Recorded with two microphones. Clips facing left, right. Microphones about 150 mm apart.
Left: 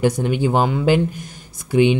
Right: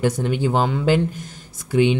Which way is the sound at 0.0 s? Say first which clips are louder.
Left 2 dB; 15° left (ahead or behind).